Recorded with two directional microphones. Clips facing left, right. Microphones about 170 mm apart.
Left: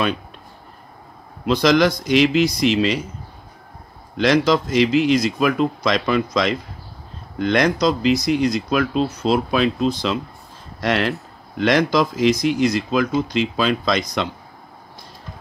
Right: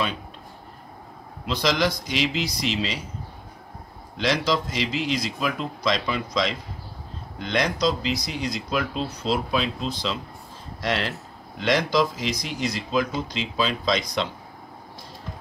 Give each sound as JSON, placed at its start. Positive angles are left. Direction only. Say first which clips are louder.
{"t": 1.4, "sound": "speech", "louder": "left 8 dB", "side_deg": 55}
{"t": 4.2, "sound": "speech", "louder": "left 7 dB", "side_deg": 55}